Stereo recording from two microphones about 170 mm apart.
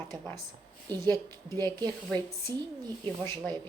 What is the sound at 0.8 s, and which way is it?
Speech, 25° right (ahead or behind).